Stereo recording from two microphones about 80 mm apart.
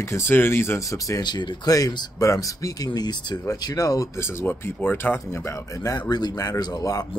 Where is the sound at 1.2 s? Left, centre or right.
Left.